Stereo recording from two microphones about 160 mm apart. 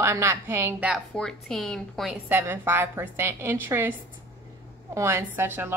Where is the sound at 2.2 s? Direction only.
15° right (ahead or behind).